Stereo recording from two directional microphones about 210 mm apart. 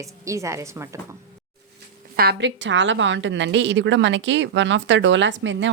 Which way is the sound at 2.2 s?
55° right (ahead or behind).